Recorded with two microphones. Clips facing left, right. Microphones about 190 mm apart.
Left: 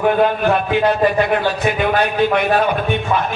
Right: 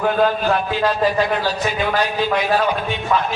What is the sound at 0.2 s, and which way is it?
A man's voice, 60° left (ahead or behind).